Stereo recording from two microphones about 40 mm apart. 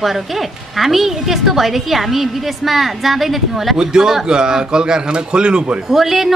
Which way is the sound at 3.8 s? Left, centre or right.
Centre.